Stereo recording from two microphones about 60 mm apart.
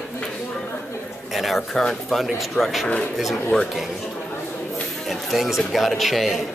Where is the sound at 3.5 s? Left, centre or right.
Centre.